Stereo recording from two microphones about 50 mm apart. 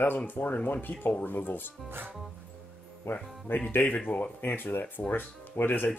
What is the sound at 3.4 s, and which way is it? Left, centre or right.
Speech, left.